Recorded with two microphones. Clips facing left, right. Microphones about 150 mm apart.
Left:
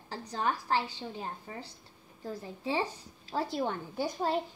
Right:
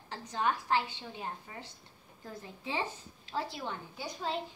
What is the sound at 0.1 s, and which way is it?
Speech, 35° left (ahead or behind).